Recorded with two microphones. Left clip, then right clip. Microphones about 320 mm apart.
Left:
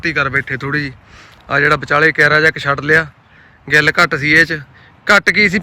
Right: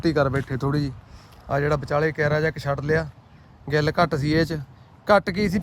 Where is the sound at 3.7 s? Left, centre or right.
Right.